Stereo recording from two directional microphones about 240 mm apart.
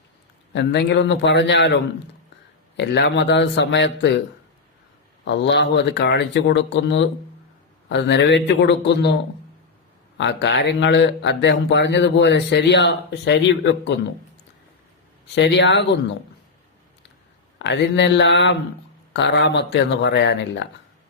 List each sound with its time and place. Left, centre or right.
0.5 s speech: left
5.2 s speech: left
10.2 s speech: left
15.4 s speech: left
17.6 s speech: left